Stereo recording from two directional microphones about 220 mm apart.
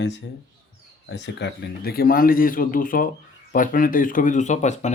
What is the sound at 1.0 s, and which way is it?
Speech, 50° left (ahead or behind).